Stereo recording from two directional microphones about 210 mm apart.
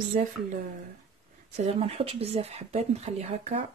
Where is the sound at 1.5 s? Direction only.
30° right (ahead or behind).